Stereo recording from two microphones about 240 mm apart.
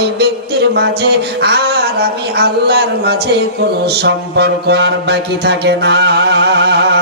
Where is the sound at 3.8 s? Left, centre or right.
Right.